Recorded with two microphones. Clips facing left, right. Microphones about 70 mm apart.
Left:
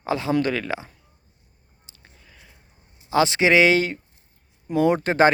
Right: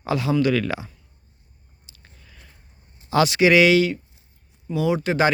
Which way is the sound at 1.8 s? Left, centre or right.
Left.